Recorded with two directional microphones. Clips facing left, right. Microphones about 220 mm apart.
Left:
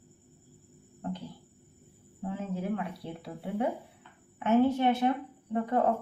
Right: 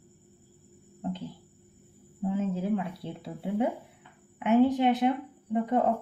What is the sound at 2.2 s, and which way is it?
A woman's voice, 20° right (ahead or behind).